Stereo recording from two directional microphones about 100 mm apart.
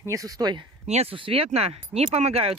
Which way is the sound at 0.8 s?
90° right.